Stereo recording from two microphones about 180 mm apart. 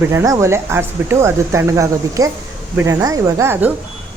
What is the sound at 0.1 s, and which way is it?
Speech, 15° right (ahead or behind).